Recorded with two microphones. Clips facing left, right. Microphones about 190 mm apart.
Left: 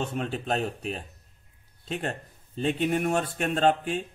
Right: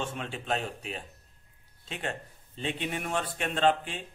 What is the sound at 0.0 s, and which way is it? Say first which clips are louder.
Speech: left 5 dB; 45° left (ahead or behind).